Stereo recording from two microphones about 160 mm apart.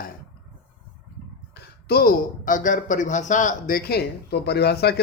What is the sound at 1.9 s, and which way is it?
Speech, 70° left (ahead or behind).